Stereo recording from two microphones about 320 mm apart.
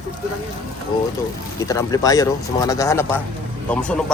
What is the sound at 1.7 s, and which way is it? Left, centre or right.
Speech, centre.